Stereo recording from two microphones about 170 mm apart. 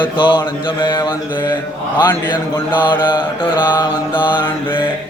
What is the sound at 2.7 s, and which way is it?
Mantra, 10° left (ahead or behind).